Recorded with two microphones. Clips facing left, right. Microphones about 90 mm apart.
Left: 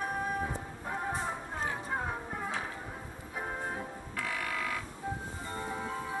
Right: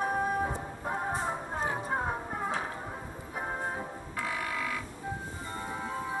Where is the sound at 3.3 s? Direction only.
20° right (ahead or behind).